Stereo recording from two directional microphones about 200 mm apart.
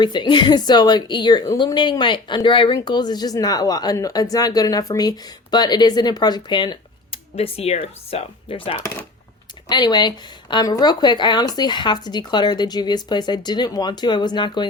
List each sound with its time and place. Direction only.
0.0 s speech: 20° left (ahead or behind)